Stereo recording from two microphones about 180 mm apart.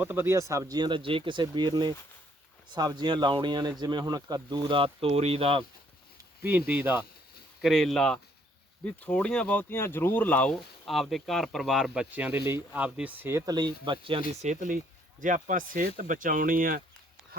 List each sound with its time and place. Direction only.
0.0 s speech: 10° right (ahead or behind); by 5.6 s 30° right (ahead or behind)
6.7 s speech: 10° right (ahead or behind); by 14.2 s 30° right (ahead or behind)
14.3 s speech: 40° right (ahead or behind)